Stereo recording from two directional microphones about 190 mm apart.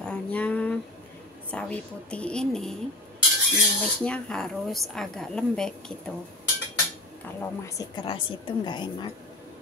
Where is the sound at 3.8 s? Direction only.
5° left (ahead or behind).